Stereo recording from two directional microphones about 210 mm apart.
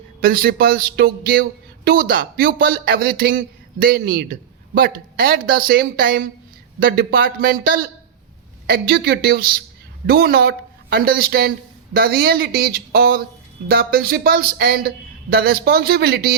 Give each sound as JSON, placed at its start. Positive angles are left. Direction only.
{"t": 0.2, "sound": "speech", "side_deg": -45}